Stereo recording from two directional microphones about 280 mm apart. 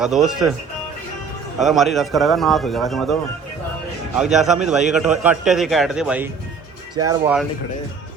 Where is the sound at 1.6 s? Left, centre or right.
Centre.